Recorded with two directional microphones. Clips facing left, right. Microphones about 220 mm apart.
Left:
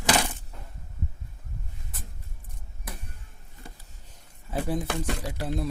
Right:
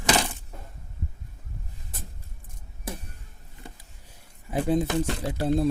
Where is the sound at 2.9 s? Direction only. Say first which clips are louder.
Right 6 dB; 25° right (ahead or behind).